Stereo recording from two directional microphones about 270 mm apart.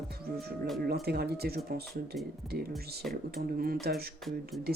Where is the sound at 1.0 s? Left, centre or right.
Right.